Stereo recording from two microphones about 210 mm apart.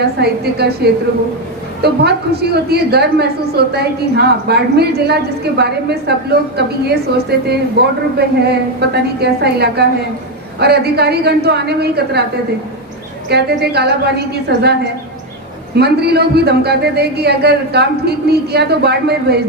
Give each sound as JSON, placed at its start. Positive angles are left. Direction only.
{"t": 0.2, "sound": "a woman's voice", "side_deg": -50}
{"t": 13.3, "sound": "a woman's voice", "side_deg": -50}